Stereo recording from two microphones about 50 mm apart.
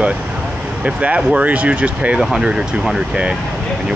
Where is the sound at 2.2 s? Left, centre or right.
Centre.